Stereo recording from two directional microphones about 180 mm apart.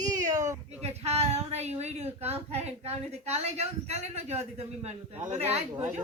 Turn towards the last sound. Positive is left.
turn(degrees=-35)  # may be behind; listen again after turning